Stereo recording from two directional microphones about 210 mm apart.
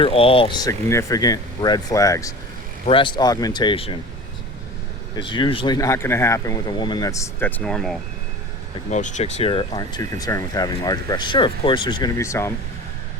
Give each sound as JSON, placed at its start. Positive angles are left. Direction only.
{"t": 0.0, "sound": "speech", "side_deg": 25}
{"t": 5.1, "sound": "speech", "side_deg": 20}
{"t": 8.9, "sound": "speech", "side_deg": 35}